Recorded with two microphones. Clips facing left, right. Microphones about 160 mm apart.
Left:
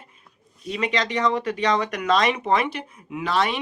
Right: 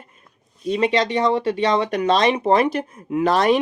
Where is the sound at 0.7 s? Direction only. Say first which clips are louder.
Right 6 dB; 30° right (ahead or behind).